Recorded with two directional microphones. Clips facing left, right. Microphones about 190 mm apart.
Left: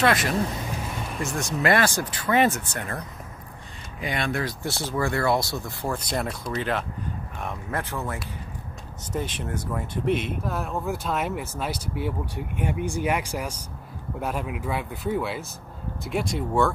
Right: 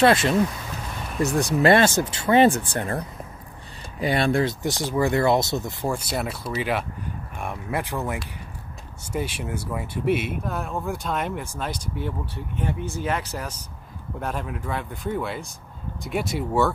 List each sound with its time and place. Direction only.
0.0 s speech: 30° right (ahead or behind); by 16.7 s 5° right (ahead or behind)